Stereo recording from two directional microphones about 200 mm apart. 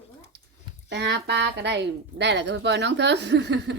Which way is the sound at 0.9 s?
60° right (ahead or behind).